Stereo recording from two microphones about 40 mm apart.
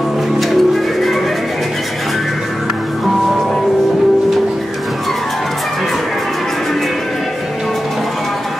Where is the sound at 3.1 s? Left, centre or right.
Centre.